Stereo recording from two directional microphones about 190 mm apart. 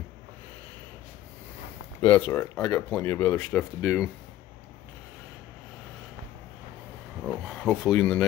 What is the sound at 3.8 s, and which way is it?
Speech, 5° right (ahead or behind).